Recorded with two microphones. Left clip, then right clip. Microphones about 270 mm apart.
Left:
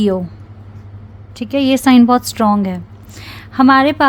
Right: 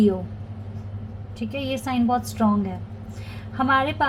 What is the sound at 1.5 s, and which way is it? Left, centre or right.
A woman's voice, left.